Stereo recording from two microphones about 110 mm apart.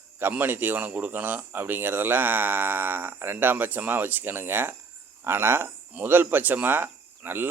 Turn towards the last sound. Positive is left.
turn(degrees=-20)  # may be behind; listen again after turning